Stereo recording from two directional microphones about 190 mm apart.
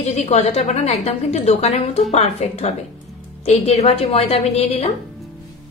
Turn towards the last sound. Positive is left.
turn(degrees=30)  # may be behind; listen again after turning